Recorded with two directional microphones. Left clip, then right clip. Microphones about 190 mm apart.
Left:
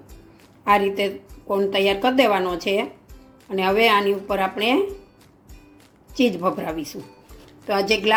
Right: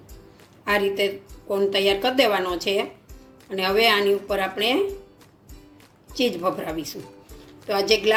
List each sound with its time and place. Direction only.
0.6 s a woman's voice: 35° left (ahead or behind)
6.1 s a woman's voice: 35° left (ahead or behind)